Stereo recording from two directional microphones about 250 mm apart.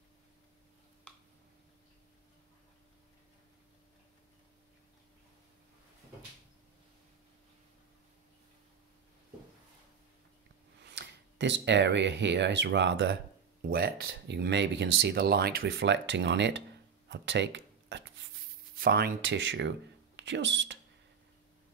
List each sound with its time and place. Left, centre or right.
10.9 s speech: right
17.1 s a sound: right
18.8 s speech: right